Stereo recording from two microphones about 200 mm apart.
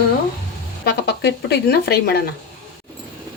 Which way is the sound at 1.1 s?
55° left (ahead or behind).